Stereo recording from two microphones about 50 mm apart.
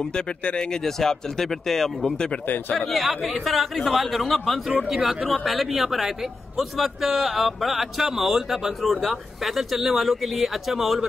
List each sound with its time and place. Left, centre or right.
0.1 s speech: centre
2.9 s a man's voice: centre
4.8 s speech: centre
5.4 s a man's voice: centre